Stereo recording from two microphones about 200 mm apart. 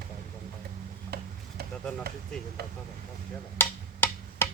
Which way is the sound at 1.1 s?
50° right (ahead or behind).